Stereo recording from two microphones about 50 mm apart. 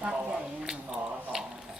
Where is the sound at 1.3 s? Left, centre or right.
Centre.